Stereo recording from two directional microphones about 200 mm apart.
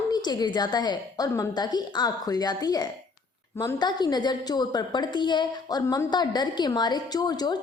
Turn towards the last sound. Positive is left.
turn(degrees=20)  # may be behind; listen again after turning